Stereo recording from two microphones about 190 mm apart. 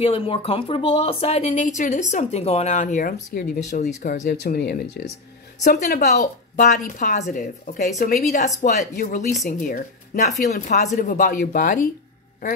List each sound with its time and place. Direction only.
0.0 s speech: 30° left (ahead or behind); by 5.1 s 60° left (ahead or behind)
5.6 s speech: 40° left (ahead or behind)